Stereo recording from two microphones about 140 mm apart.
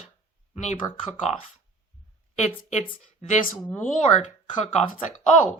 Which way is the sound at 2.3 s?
55° left (ahead or behind).